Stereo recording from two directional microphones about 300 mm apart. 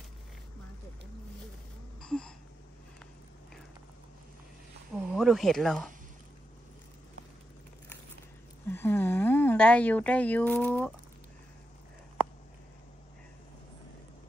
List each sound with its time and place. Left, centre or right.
2.0 s a sound: centre
4.9 s speech: centre
8.6 s speech: centre